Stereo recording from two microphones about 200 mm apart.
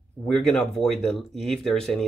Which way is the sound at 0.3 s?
5° left (ahead or behind).